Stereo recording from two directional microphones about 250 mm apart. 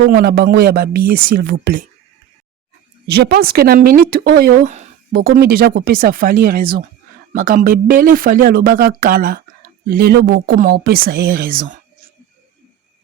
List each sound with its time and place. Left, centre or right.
0.0 s speech: right
3.1 s speech: right